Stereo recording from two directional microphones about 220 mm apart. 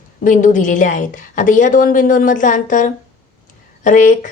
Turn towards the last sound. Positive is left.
turn(degrees=35)  # may be behind; listen again after turning